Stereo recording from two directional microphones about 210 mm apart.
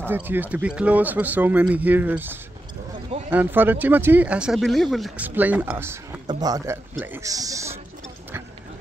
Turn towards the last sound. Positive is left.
turn(degrees=-15)  # may be behind; listen again after turning